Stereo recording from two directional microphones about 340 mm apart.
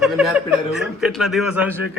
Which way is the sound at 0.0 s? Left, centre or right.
Centre.